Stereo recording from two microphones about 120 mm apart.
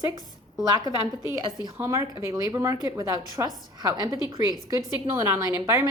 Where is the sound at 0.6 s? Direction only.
35° right (ahead or behind).